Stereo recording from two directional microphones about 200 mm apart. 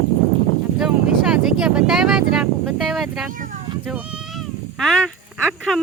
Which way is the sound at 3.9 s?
5° right (ahead or behind).